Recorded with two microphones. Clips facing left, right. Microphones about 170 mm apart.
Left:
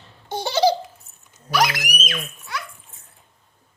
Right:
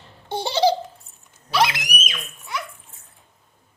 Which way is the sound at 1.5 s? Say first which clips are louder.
Even; 25° right (ahead or behind).